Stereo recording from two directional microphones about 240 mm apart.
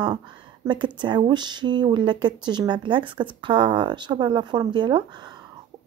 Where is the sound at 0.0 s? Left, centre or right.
Centre.